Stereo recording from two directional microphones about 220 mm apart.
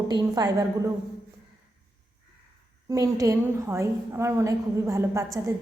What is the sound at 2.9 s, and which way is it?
A woman's voice, 15° right (ahead or behind).